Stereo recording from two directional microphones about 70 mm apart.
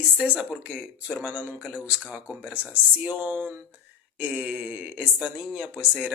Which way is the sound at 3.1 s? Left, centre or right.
Right.